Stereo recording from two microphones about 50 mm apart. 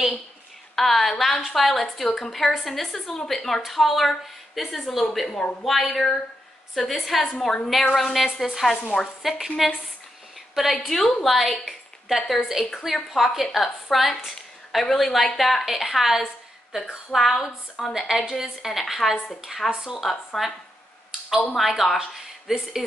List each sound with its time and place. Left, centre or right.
0.7 s a woman's voice: centre
5.3 s speech: left
5.6 s a woman's voice: centre
10.5 s a woman's voice: centre
10.9 s a woman's voice: centre
11.6 s a woman's voice: centre
17.1 s a woman's voice: centre
21.5 s a woman's voice: centre
21.9 s speech: centre